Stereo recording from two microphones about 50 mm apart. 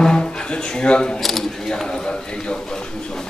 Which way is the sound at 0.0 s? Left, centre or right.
Centre.